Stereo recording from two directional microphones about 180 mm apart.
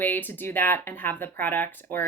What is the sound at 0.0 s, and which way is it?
Speech, 10° left (ahead or behind).